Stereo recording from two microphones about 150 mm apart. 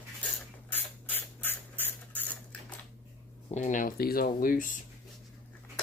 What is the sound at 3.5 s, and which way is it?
Speech, 55° left (ahead or behind).